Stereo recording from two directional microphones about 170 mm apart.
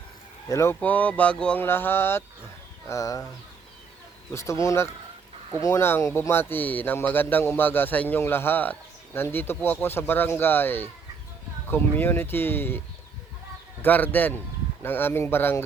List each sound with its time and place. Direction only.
0.4 s a man's voice: 15° left (ahead or behind)
4.3 s a man's voice: 15° left (ahead or behind)
13.8 s a man's voice: 10° left (ahead or behind)